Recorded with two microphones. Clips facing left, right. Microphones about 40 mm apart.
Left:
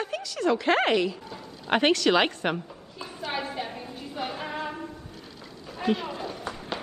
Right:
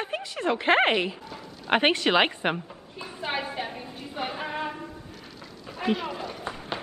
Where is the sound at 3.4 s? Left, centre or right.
Centre.